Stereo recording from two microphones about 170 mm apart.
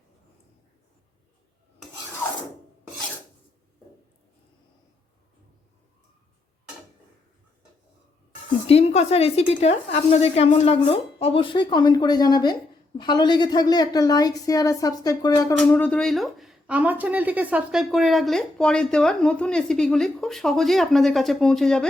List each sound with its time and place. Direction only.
8.6 s a woman's voice: 40° left (ahead or behind); by 15.5 s 20° left (ahead or behind)
15.5 s speech: 5° left (ahead or behind)